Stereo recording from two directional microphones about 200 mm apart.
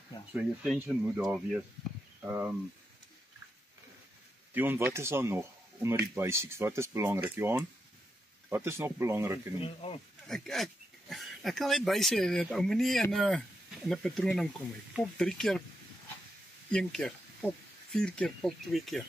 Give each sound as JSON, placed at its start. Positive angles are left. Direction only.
{"t": 0.3, "sound": "speech", "side_deg": -10}
{"t": 4.6, "sound": "speech", "side_deg": -10}
{"t": 9.6, "sound": "speech", "side_deg": 30}
{"t": 10.2, "sound": "speech", "side_deg": 0}
{"t": 16.7, "sound": "speech", "side_deg": 0}